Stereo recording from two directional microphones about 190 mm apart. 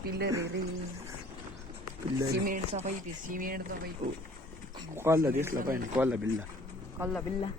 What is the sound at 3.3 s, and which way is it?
Speech, 45° right (ahead or behind).